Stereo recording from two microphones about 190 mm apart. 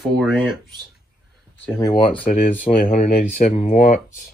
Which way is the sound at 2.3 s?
40° left (ahead or behind).